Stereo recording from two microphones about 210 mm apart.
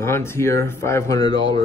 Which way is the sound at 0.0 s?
10° left (ahead or behind).